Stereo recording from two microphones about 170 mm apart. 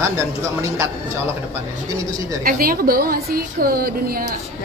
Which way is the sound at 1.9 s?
20° right (ahead or behind).